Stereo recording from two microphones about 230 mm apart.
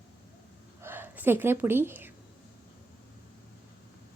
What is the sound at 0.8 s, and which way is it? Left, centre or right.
Gasp, centre.